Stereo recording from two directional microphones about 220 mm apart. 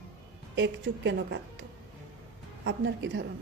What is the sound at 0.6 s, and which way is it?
Speech, 55° right (ahead or behind).